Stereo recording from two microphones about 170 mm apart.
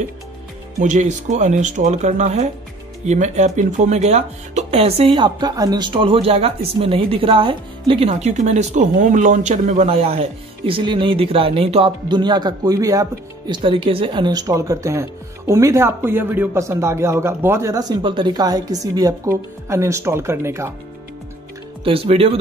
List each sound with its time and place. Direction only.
0.7 s speech: 45° right (ahead or behind); by 13.6 s 20° right (ahead or behind)
13.6 s speech: 30° right (ahead or behind); by 20.7 s 15° right (ahead or behind)
21.8 s speech: 35° right (ahead or behind)